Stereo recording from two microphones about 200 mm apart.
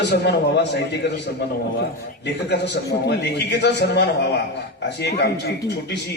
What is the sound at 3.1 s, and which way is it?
A man's voice, 55° left (ahead or behind).